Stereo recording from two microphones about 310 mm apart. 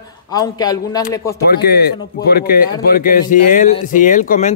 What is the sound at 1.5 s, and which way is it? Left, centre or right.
Speech, left.